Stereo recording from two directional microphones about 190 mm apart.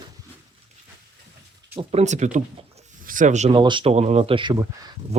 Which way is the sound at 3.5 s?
25° right (ahead or behind).